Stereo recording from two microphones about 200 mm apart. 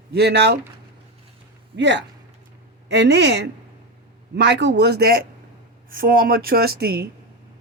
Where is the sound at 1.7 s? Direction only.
60° right (ahead or behind).